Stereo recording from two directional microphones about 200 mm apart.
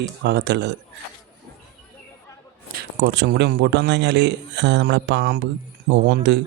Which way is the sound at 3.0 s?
60° right (ahead or behind).